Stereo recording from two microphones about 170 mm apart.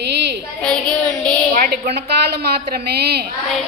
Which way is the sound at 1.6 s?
60° right (ahead or behind).